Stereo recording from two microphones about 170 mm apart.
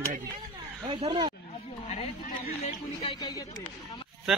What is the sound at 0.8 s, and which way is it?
Speech, 25° right (ahead or behind).